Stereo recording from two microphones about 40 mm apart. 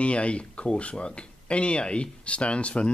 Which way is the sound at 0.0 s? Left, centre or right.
Left.